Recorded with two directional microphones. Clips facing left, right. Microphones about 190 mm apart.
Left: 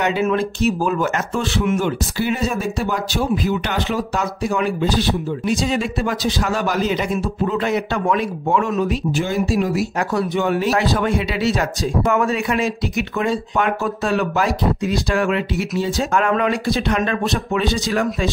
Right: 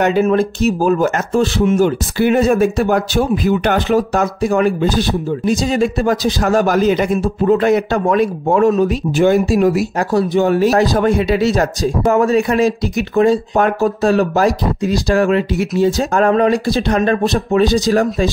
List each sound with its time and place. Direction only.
0.0 s a man's voice: 45° right (ahead or behind)
2.1 s a man's voice: 55° right (ahead or behind); by 8.9 s 40° right (ahead or behind)
9.1 s speech: 60° right (ahead or behind)
9.9 s a man's voice: 35° right (ahead or behind)